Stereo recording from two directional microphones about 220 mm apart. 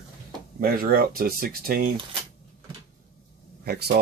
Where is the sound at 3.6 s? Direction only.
45° right (ahead or behind).